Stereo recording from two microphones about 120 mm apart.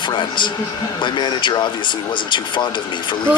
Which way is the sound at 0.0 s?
40° left (ahead or behind).